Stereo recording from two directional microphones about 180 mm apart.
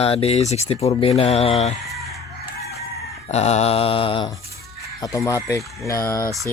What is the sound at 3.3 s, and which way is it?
Speech, 35° left (ahead or behind).